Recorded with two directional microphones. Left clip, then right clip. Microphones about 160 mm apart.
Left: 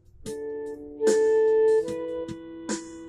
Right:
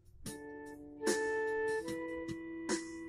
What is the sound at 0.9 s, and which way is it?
Music, 20° right (ahead or behind).